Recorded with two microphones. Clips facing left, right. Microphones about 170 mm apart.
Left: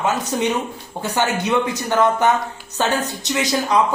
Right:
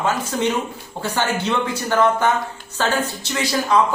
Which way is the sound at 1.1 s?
15° left (ahead or behind).